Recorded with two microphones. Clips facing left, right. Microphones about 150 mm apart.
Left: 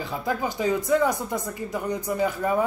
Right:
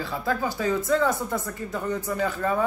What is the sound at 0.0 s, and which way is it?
Speech, 15° left (ahead or behind).